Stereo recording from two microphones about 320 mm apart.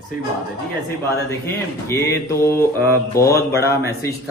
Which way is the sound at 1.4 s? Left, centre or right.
Centre.